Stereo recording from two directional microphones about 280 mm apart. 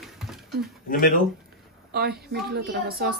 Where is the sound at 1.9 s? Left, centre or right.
Right.